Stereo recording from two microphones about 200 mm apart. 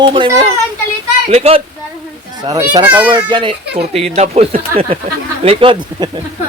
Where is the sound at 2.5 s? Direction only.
20° right (ahead or behind).